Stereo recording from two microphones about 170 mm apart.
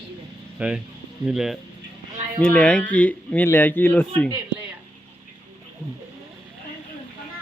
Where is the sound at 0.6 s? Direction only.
5° right (ahead or behind); by 4.0 s 10° left (ahead or behind).